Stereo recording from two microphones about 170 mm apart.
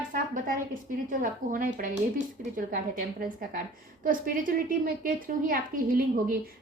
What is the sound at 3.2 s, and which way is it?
A woman's voice, 55° right (ahead or behind).